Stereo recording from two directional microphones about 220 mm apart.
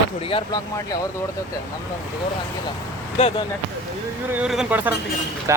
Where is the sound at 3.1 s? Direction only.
25° left (ahead or behind).